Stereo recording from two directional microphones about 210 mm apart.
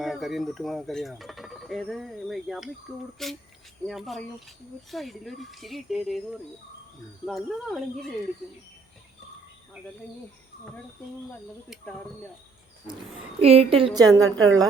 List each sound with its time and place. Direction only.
0.0 s speech: centre (ahead or behind)
13.4 s a woman's voice: 30° right (ahead or behind)
14.3 s a woman's voice: 70° right (ahead or behind)